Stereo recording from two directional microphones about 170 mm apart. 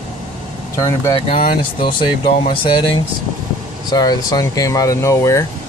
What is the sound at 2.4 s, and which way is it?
Speech, 30° left (ahead or behind).